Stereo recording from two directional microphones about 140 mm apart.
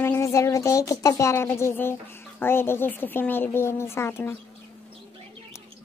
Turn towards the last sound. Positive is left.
turn(degrees=20)  # may be behind; listen again after turning